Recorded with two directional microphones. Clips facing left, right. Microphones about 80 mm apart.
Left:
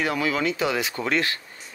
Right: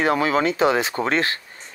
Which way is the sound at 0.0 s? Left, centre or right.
Right.